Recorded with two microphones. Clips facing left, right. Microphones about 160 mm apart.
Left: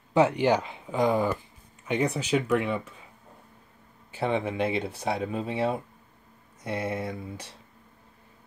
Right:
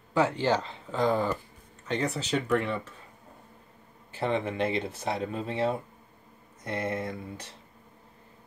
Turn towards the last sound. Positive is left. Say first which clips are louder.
# left 1 dB
turn(degrees=10)  # may be behind; listen again after turning